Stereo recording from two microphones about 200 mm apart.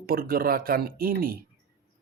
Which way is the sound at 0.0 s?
45° right (ahead or behind).